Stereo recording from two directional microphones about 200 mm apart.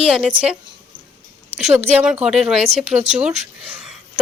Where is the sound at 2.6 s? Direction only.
30° right (ahead or behind).